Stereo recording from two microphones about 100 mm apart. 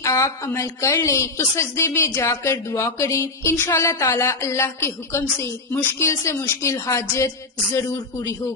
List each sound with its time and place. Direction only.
0.0 s a woman's voice: 30° left (ahead or behind)